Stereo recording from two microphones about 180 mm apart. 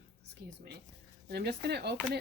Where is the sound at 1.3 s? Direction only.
65° right (ahead or behind).